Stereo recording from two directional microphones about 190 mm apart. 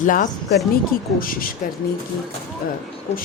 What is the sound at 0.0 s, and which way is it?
Speech, 45° left (ahead or behind).